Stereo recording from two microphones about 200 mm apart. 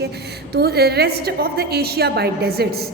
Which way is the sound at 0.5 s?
55° right (ahead or behind).